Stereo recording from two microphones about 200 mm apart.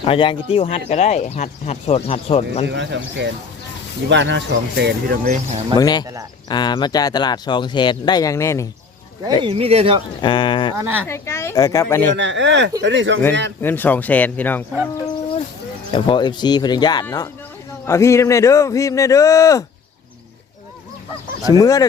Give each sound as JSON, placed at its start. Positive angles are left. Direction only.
{"t": 0.0, "sound": "speech", "side_deg": 25}
{"t": 2.6, "sound": "speech", "side_deg": -60}
{"t": 5.7, "sound": "speech", "side_deg": 20}
{"t": 9.4, "sound": "speech", "side_deg": -30}
{"t": 10.2, "sound": "speech", "side_deg": 25}
{"t": 10.8, "sound": "speech", "side_deg": -10}
{"t": 11.0, "sound": "a man's voice", "side_deg": 15}
{"t": 12.1, "sound": "speech", "side_deg": -65}
{"t": 13.6, "sound": "a man's voice", "side_deg": 10}
{"t": 15.9, "sound": "a man's voice", "side_deg": 25}
{"t": 21.4, "sound": "a man's voice", "side_deg": 15}